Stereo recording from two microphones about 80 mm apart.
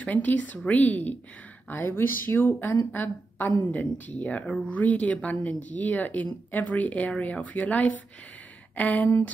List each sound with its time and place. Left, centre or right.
0.0 s a woman's voice: left